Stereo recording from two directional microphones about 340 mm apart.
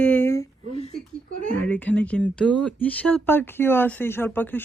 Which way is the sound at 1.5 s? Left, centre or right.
Centre.